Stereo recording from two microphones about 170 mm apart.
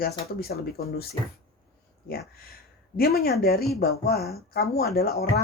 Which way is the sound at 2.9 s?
65° left (ahead or behind).